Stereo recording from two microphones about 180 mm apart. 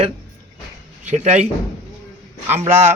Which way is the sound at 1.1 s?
40° right (ahead or behind).